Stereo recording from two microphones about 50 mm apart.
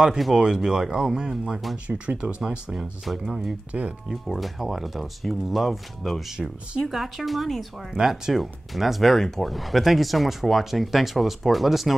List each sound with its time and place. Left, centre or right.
0.4 s speech: centre
1.9 s speech: right
2.7 s speech: centre
6.3 s speech: centre
6.9 s speech: centre